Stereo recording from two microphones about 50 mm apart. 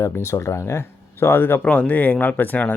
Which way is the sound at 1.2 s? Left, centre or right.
Left.